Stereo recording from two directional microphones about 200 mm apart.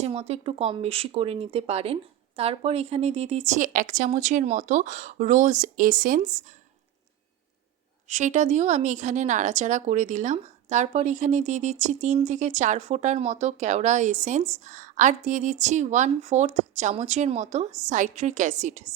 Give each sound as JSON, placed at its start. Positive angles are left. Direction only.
{"t": 0.0, "sound": "speech", "side_deg": -30}
{"t": 8.0, "sound": "speech", "side_deg": -35}